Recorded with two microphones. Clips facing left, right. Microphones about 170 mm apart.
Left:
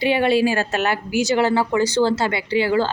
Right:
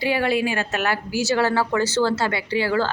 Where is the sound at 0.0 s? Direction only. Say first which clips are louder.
Left 4 dB; 20° left (ahead or behind).